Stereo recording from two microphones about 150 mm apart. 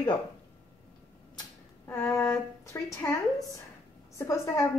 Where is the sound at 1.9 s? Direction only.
15° left (ahead or behind).